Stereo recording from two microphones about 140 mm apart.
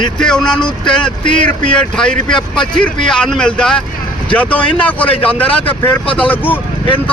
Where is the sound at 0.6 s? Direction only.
35° left (ahead or behind).